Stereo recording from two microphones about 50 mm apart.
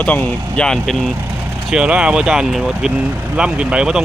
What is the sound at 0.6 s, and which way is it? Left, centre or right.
Speech, centre.